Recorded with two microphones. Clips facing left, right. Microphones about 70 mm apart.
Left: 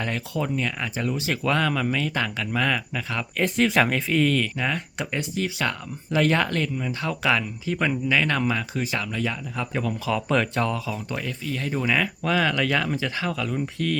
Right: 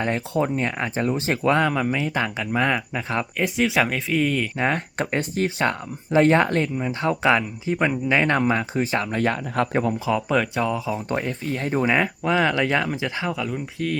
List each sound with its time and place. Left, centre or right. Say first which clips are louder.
0.0 s speech: right 5 dB; right
3.3 s speech: left 1 dB; centre
4.5 s speech: right 4 dB; right
9.2 s speech: right 6 dB; right
10.1 s speech: left 2 dB; centre
10.8 s speech: right 5 dB; right; by 14.0 s centre